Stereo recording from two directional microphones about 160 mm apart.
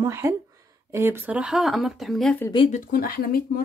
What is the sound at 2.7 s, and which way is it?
Speech, 60° left (ahead or behind).